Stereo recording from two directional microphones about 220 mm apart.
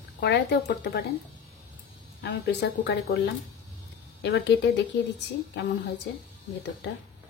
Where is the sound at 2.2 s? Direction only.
50° left (ahead or behind).